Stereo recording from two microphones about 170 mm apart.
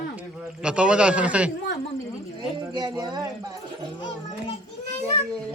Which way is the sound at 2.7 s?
25° right (ahead or behind).